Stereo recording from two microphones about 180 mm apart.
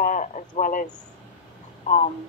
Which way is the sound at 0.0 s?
45° left (ahead or behind).